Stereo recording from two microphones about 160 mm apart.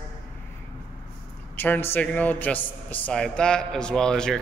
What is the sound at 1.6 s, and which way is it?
A man's voice, 15° left (ahead or behind).